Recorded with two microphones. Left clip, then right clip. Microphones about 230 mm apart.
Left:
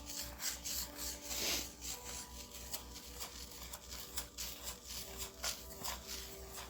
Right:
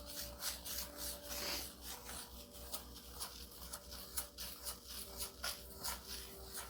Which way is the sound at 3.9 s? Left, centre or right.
Centre.